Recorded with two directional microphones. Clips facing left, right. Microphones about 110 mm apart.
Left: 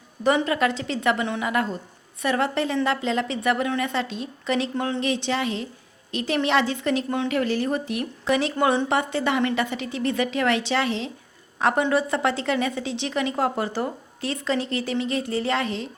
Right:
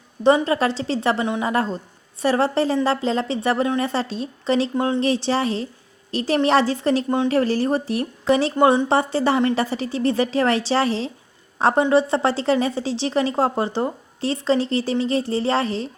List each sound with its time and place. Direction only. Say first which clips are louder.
0.4 s a woman's voice: right 3 dB; 30° right (ahead or behind)